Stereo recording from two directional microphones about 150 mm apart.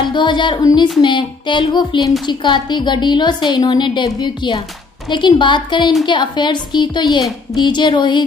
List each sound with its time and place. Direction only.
0.1 s a woman's voice: 30° left (ahead or behind)